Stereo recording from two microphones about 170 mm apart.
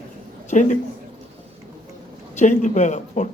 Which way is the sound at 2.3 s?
45° left (ahead or behind).